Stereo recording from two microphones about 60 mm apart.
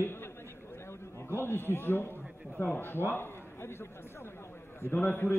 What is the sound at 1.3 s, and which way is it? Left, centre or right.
A man's voice, left.